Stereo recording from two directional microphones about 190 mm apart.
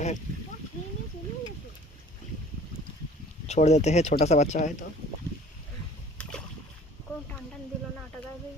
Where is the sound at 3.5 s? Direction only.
35° left (ahead or behind).